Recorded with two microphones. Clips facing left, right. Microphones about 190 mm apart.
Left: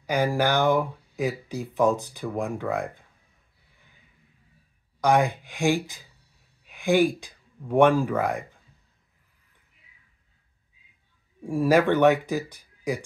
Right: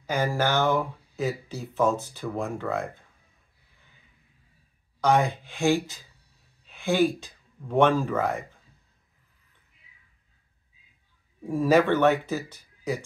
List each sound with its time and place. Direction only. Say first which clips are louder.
0.0 s speech: left 2 dB; 15° left (ahead or behind)
5.0 s speech: left 1 dB; 10° left (ahead or behind)
11.4 s speech: left 1 dB; 10° left (ahead or behind)